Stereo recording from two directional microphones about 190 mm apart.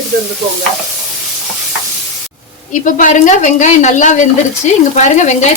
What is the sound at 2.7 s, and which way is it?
Speech, 45° left (ahead or behind).